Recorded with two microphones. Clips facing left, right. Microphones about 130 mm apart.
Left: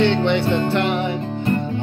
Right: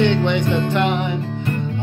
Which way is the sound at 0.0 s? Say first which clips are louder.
Even; 15° right (ahead or behind).